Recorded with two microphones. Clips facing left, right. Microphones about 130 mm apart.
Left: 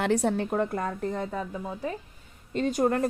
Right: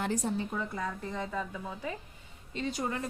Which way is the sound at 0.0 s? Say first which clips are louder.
Left 7 dB; 70° left (ahead or behind).